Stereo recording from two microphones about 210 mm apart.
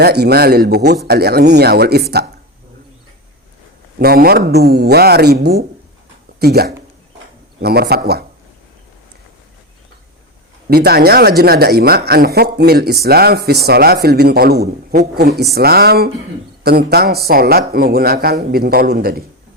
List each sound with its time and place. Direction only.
0.0 s speech: 50° right (ahead or behind)
3.9 s speech: 45° right (ahead or behind)
10.7 s speech: 50° right (ahead or behind)